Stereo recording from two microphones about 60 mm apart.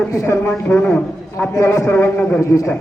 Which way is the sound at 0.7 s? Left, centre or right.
Left.